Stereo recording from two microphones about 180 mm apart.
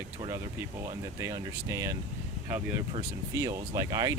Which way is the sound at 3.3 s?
20° right (ahead or behind).